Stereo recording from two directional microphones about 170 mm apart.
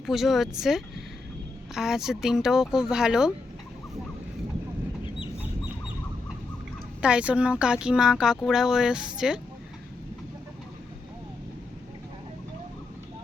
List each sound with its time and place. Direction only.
0.0 s speech: centre (ahead or behind)
7.0 s speech: 5° right (ahead or behind)